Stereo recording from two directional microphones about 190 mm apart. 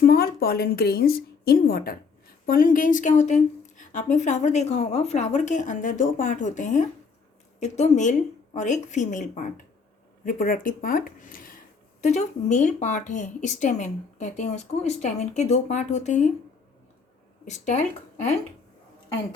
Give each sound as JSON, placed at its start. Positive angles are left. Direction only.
{"t": 0.0, "sound": "a woman's voice", "side_deg": 50}
{"t": 17.4, "sound": "speech", "side_deg": 40}